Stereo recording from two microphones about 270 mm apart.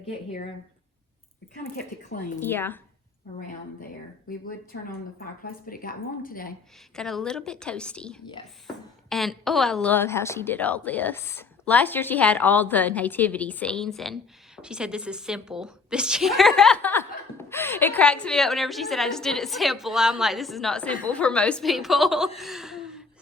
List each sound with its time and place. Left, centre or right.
1.6 s speech: left
2.4 s speech: centre
4.3 s speech: left
6.9 s a woman's voice: centre
22.4 s gasp: centre